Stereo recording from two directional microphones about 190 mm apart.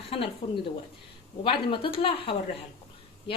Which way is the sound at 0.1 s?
30° left (ahead or behind).